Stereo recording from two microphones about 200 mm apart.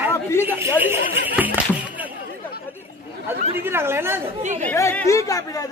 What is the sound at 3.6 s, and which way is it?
Speech, 10° right (ahead or behind).